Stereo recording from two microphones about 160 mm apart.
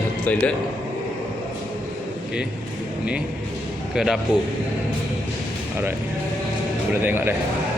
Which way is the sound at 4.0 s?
5° right (ahead or behind).